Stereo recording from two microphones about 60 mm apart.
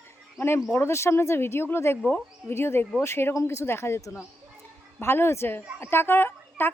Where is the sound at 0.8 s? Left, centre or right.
Left.